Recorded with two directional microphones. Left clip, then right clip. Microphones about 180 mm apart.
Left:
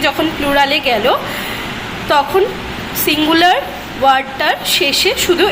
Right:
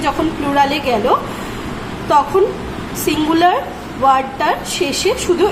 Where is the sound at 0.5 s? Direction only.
Centre (ahead or behind).